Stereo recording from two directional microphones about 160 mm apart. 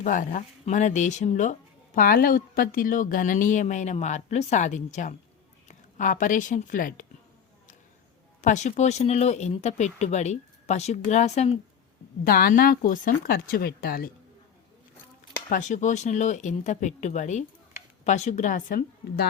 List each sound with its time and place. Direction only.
0.0 s a woman's voice: 55° left (ahead or behind)
2.0 s a woman's voice: 65° left (ahead or behind)
8.4 s a woman's voice: 50° left (ahead or behind)
12.2 s speech: 70° left (ahead or behind)
15.4 s a woman's voice: 50° left (ahead or behind); by 19.3 s 80° left